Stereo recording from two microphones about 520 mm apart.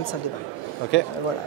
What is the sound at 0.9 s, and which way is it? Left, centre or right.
Speech, centre.